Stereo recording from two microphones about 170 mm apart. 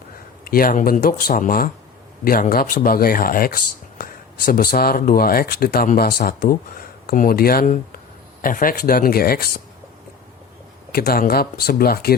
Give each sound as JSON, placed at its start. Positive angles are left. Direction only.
{"t": 0.4, "sound": "speech", "side_deg": 60}
{"t": 10.9, "sound": "speech", "side_deg": 60}